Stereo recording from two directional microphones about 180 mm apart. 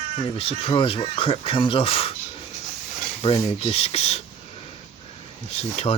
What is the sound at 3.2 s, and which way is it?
Speech, 35° left (ahead or behind).